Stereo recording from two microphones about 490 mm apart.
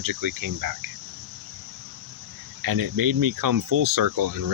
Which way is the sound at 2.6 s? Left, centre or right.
Right.